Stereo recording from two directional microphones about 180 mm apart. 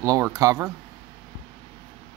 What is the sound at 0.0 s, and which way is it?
Speech, 20° right (ahead or behind).